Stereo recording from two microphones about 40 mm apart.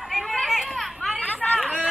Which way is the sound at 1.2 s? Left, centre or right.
Left.